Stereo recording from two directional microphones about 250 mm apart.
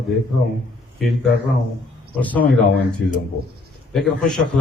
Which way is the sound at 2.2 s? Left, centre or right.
Centre.